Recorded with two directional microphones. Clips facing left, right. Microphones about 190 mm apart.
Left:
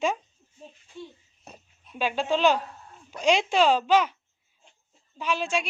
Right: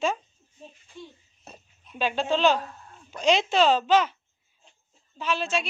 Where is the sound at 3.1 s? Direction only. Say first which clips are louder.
Even; 10° left (ahead or behind).